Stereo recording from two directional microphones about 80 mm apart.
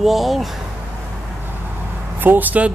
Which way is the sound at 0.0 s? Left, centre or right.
Centre.